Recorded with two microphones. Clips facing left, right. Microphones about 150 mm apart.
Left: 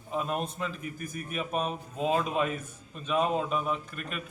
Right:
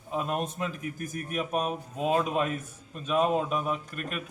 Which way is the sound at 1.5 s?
10° right (ahead or behind).